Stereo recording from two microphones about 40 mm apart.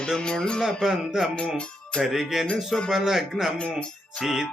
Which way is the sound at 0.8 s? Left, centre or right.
Centre.